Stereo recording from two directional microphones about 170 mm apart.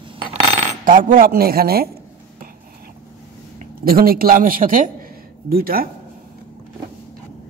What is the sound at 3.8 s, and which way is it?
A man's voice, 60° right (ahead or behind).